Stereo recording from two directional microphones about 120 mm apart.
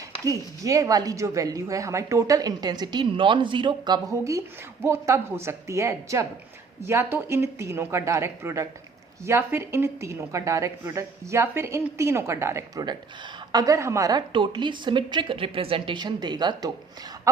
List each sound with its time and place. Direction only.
0.3 s a woman's voice: 30° right (ahead or behind)